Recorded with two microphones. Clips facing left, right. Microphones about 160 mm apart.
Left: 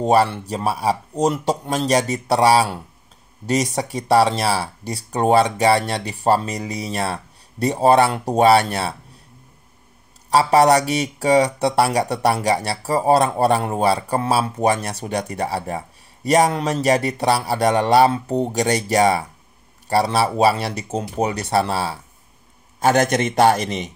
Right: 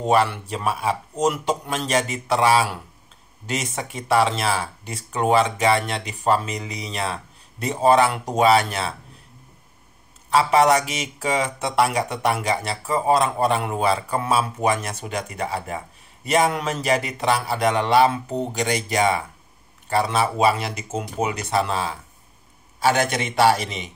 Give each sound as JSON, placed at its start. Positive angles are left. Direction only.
{"t": 0.0, "sound": "speech", "side_deg": 35}
{"t": 10.3, "sound": "speech", "side_deg": 35}
{"t": 22.8, "sound": "a man's voice", "side_deg": 45}